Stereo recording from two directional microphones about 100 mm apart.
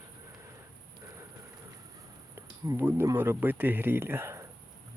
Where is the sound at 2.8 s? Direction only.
25° right (ahead or behind).